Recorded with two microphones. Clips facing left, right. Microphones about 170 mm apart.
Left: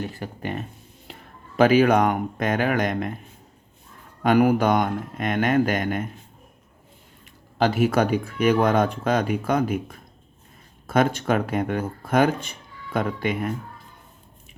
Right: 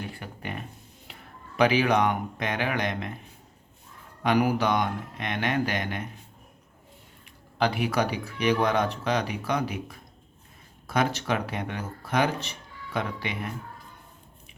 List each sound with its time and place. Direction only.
0.0 s speech: 40° left (ahead or behind)
4.2 s speech: 50° left (ahead or behind)
7.6 s speech: 45° left (ahead or behind)
10.8 s speech: 50° left (ahead or behind)